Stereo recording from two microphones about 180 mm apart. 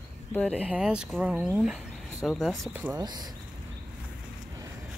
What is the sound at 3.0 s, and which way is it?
Speech, 20° right (ahead or behind).